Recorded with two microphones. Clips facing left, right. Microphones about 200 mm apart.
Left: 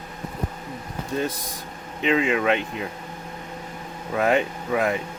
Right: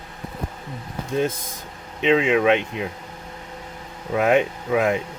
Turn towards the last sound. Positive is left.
turn(degrees=-15)  # may be behind; listen again after turning